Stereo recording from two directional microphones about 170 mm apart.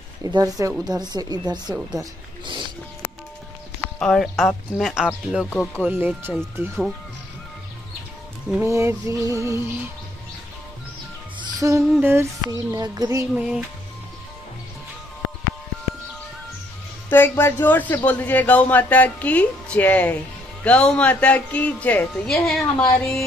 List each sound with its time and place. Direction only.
0.2 s speech: 20° right (ahead or behind)
4.0 s speech: centre (ahead or behind)
5.9 s music: 10° right (ahead or behind)
8.6 s music: 15° right (ahead or behind)
11.6 s music: 15° right (ahead or behind)
12.0 s speech: 15° right (ahead or behind)
13.3 s speech: 5° right (ahead or behind)
17.1 s a man's voice: 15° left (ahead or behind)